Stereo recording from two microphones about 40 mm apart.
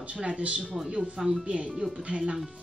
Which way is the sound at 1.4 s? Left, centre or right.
Right.